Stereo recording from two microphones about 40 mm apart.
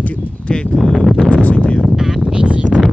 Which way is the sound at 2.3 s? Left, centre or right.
Right.